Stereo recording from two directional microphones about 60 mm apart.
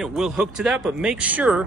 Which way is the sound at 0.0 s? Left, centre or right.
Centre.